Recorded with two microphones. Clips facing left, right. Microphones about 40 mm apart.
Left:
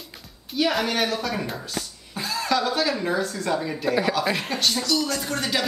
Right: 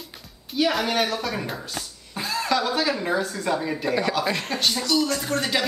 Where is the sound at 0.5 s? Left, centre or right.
Centre.